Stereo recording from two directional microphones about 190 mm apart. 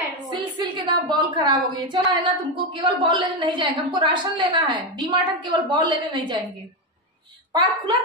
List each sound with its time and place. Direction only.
0.2 s a woman's voice: 25° right (ahead or behind)
7.5 s a woman's voice: 25° right (ahead or behind)